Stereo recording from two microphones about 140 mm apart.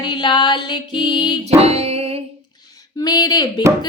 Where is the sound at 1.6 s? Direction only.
45° right (ahead or behind).